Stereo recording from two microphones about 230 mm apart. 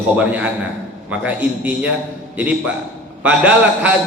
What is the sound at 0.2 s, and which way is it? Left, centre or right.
A man's voice, centre.